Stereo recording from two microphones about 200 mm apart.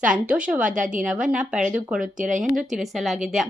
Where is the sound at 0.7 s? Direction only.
40° right (ahead or behind).